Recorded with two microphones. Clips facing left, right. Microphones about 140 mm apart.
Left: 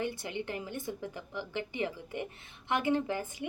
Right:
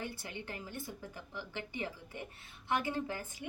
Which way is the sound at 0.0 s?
15° left (ahead or behind).